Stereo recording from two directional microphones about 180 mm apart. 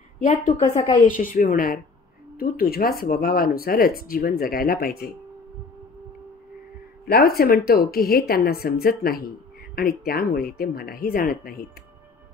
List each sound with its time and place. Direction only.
0.2 s a woman's voice: 40° left (ahead or behind)
0.5 s a woman's voice: 20° left (ahead or behind)
1.0 s a woman's voice: 50° left (ahead or behind)
7.1 s speech: 60° left (ahead or behind)